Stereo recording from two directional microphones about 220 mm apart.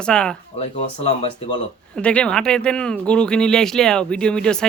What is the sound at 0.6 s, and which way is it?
Speech, 25° left (ahead or behind).